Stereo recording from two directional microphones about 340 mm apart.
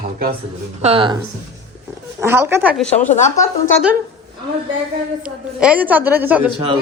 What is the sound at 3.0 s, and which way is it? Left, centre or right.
Speech, left.